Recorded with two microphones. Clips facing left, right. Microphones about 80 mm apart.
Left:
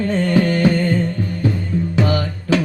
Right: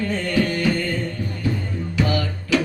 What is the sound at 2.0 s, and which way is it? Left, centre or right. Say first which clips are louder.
Music: even; left.